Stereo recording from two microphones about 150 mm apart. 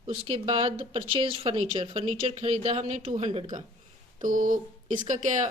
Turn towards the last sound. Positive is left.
turn(degrees=-55)  # may be behind; listen again after turning